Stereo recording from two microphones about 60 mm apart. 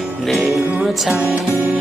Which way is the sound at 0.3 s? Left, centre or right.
Centre.